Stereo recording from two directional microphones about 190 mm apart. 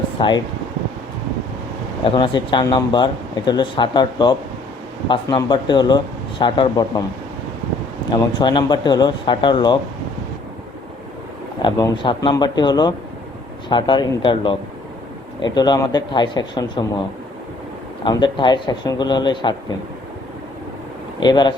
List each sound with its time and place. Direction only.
0.2 s speech: 25° left (ahead or behind)
2.0 s speech: 25° left (ahead or behind)
8.1 s speech: 25° left (ahead or behind)
11.6 s speech: 25° left (ahead or behind)
18.0 s speech: 25° left (ahead or behind)
21.2 s speech: 25° left (ahead or behind)